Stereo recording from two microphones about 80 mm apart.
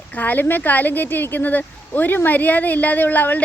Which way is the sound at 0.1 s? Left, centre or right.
Left.